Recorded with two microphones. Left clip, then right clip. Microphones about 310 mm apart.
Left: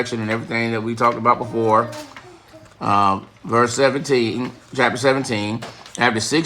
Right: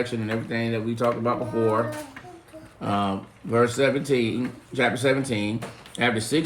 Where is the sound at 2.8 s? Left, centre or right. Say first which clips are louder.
Left 10 dB; left.